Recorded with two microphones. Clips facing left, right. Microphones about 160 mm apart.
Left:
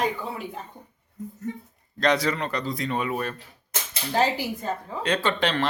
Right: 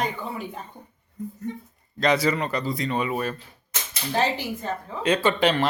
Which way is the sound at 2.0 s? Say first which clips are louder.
Right 1 dB; 5° right (ahead or behind).